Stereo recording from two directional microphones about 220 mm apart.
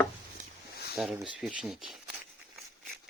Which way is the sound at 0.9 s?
Centre (ahead or behind).